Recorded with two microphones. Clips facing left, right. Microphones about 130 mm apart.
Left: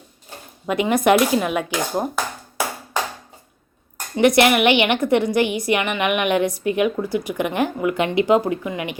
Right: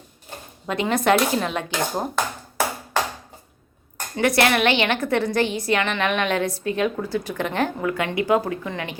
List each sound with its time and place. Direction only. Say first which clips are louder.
0.7 s a woman's voice: left 3 dB; 15° left (ahead or behind)
4.2 s a woman's voice: left 4 dB; 20° left (ahead or behind)